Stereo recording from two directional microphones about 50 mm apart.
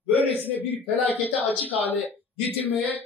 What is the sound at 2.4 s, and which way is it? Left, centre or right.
Speech, right.